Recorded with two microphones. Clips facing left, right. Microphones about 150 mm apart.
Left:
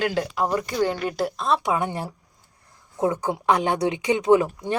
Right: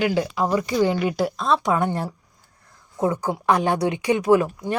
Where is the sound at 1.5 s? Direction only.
10° left (ahead or behind).